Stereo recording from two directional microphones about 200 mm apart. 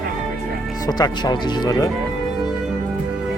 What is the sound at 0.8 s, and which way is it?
Speech, 20° left (ahead or behind).